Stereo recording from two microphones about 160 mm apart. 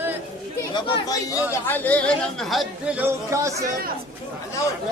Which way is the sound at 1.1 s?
20° left (ahead or behind).